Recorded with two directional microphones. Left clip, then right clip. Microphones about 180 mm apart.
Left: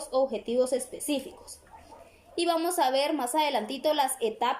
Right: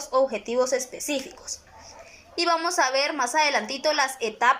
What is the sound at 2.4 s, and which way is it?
Speech, 20° left (ahead or behind).